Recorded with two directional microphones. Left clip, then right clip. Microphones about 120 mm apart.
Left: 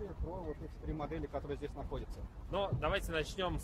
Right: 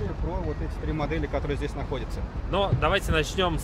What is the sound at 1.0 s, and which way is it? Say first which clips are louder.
Speech: right 12 dB; 15° left (ahead or behind).